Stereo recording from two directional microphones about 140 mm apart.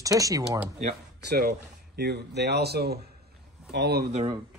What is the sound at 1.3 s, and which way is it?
Speech, 90° right.